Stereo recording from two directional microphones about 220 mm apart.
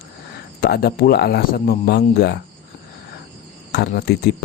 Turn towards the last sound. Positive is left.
turn(degrees=45)  # may be behind; listen again after turning